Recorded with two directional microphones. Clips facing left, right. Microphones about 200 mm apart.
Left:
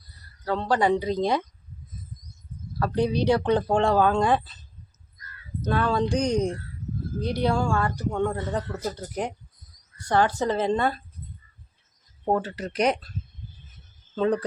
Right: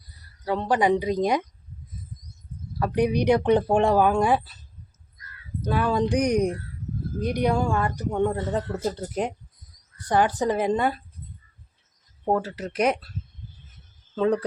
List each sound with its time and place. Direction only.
0.1 s speech: 15° right (ahead or behind)
2.7 s speech: 15° right (ahead or behind)
5.6 s speech: 10° right (ahead or behind)
12.2 s speech: 5° right (ahead or behind)
14.2 s speech: 10° right (ahead or behind)